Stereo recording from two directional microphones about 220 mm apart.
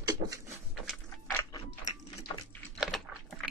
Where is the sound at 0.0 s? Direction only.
15° right (ahead or behind).